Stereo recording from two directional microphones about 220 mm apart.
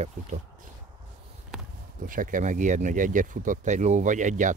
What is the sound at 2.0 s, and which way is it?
Speech, 40° right (ahead or behind).